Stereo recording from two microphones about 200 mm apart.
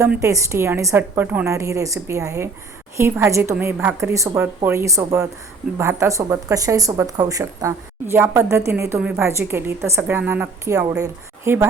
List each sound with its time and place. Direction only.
0.0 s speech: 15° right (ahead or behind)